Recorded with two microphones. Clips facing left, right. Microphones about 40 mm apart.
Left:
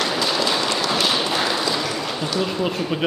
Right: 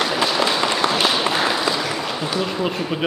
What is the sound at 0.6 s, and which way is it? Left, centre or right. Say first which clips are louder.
Applause: right 3 dB; right.